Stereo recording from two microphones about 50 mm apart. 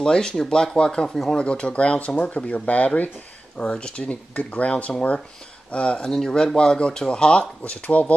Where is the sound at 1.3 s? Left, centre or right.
Centre.